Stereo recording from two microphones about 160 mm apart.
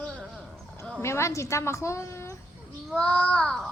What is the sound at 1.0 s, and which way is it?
A woman's voice, 15° left (ahead or behind).